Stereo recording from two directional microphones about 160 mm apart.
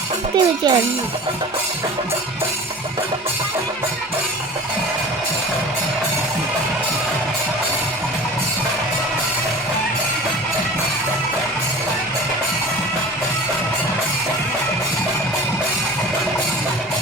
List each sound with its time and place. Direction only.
0.3 s a child's voice: 25° right (ahead or behind)